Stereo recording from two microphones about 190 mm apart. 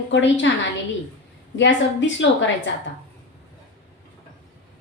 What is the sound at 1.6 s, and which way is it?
A woman's voice, 75° left (ahead or behind).